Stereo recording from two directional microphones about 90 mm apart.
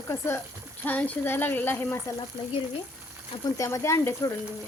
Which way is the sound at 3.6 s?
35° left (ahead or behind).